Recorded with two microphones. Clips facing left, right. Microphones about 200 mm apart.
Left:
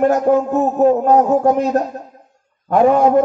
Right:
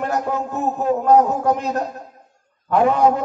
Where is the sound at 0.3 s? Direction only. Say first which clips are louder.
Left 9 dB; 45° left (ahead or behind).